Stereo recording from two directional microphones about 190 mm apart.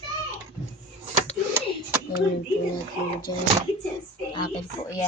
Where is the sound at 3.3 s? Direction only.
25° left (ahead or behind).